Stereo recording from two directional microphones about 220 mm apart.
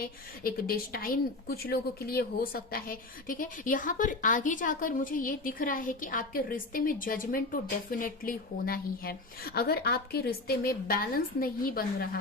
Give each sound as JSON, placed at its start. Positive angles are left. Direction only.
{"t": 0.0, "sound": "a woman's voice", "side_deg": 40}